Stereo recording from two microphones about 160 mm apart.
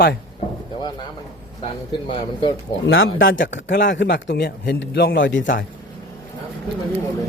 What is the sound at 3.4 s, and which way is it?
A man's voice, 90° left.